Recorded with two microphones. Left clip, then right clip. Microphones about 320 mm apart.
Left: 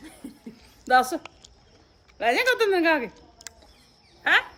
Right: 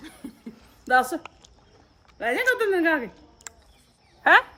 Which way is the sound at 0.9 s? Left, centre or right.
Centre.